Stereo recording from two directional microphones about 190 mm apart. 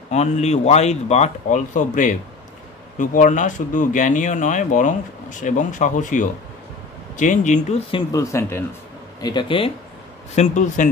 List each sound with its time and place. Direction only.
0.1 s speech: 35° left (ahead or behind)
8.1 s speech: 15° left (ahead or behind)
9.2 s speech: 25° left (ahead or behind)
10.3 s speech: 40° left (ahead or behind)